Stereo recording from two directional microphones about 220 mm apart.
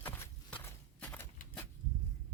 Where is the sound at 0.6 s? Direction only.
10° left (ahead or behind).